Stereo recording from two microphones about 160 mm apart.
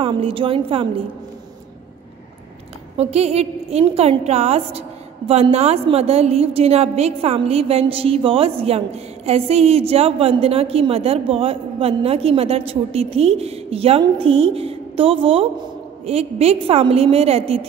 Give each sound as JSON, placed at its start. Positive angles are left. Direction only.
{"t": 0.0, "sound": "a woman's voice", "side_deg": -35}
{"t": 3.0, "sound": "a woman's voice", "side_deg": -40}